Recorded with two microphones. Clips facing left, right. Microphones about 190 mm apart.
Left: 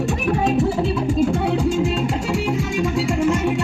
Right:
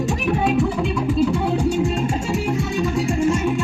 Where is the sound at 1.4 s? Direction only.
80° left.